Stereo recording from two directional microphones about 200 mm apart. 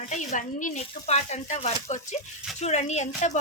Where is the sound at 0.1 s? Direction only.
35° left (ahead or behind).